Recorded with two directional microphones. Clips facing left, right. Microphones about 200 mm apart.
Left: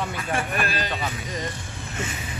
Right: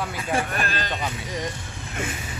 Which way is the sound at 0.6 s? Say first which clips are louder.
Left 1 dB; 10° left (ahead or behind).